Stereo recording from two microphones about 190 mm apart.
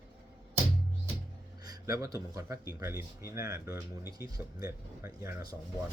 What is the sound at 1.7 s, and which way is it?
A man's voice, 20° right (ahead or behind).